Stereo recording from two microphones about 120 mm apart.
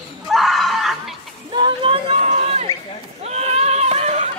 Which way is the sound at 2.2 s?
70° right (ahead or behind).